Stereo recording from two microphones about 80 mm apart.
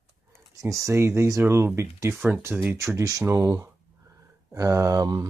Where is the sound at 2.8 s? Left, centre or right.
Right.